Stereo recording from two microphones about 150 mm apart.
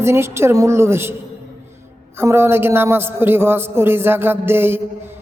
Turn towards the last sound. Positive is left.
turn(degrees=-15)  # may be behind; listen again after turning